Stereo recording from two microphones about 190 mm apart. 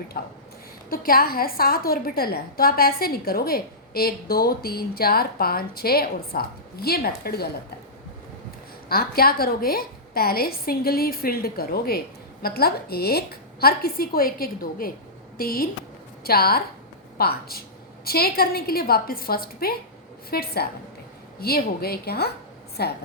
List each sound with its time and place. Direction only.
0.1 s a woman's voice: 50° left (ahead or behind)
8.9 s a woman's voice: 50° left (ahead or behind)